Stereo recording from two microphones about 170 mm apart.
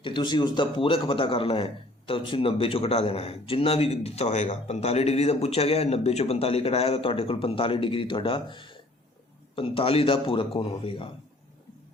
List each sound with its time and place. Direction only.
0.0 s a man's voice: 25° left (ahead or behind)